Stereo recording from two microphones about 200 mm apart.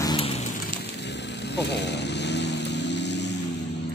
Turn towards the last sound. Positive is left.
turn(degrees=60)  # may be behind; listen again after turning